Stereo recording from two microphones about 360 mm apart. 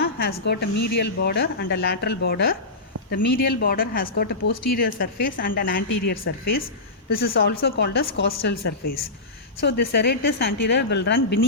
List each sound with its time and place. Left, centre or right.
0.0 s a woman's voice: left